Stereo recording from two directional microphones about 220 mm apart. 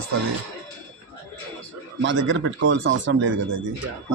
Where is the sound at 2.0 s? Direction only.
60° right (ahead or behind).